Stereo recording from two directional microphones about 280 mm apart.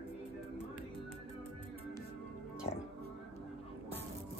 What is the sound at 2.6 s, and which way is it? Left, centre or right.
Music, left.